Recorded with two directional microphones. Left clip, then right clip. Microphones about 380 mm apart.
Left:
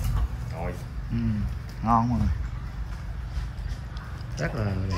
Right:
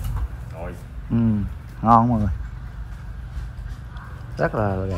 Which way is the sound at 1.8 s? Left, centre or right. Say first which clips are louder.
Right 8 dB; centre.